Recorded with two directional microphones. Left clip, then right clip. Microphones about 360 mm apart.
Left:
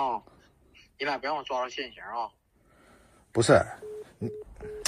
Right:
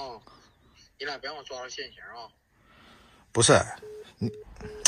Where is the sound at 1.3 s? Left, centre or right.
Left.